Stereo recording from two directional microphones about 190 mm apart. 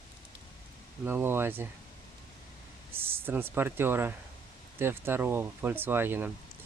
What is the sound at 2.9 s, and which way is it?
Speech, 10° right (ahead or behind).